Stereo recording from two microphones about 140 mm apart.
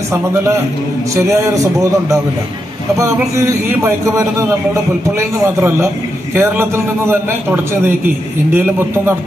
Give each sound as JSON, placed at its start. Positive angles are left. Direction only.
{"t": 0.1, "sound": "a man's voice", "side_deg": -20}
{"t": 5.6, "sound": "a man's voice", "side_deg": -15}
{"t": 8.5, "sound": "a man's voice", "side_deg": -15}